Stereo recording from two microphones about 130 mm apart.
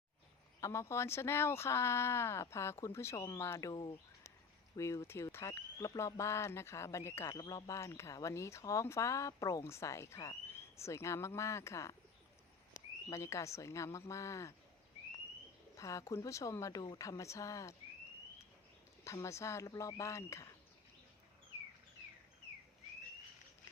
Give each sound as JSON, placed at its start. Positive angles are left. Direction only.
{"t": 0.6, "sound": "speech", "side_deg": 20}
{"t": 13.1, "sound": "speech", "side_deg": 25}
{"t": 15.7, "sound": "speech", "side_deg": 25}
{"t": 19.0, "sound": "speech", "side_deg": 25}